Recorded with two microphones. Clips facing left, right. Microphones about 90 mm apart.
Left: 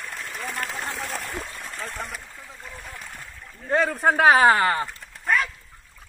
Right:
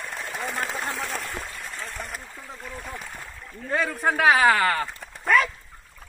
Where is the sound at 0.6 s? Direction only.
15° right (ahead or behind).